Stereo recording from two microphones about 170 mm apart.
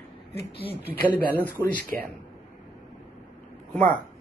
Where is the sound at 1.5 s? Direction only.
10° left (ahead or behind).